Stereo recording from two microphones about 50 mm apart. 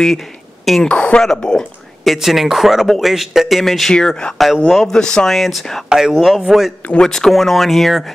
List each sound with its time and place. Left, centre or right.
0.0 s speech: centre
0.8 s a man's voice: left
2.1 s speech: centre
3.9 s a man's voice: centre
5.3 s speech: centre
5.9 s speech: centre
6.1 s speech: centre
7.0 s speech: centre